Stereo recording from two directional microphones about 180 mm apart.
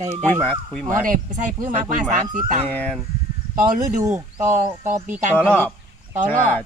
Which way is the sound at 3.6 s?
50° right (ahead or behind).